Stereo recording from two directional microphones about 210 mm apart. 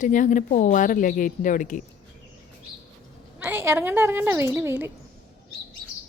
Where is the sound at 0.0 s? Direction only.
40° left (ahead or behind).